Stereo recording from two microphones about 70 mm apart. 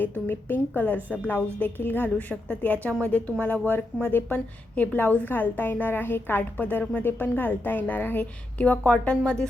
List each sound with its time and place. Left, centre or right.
0.0 s a woman's voice: left; by 9.5 s centre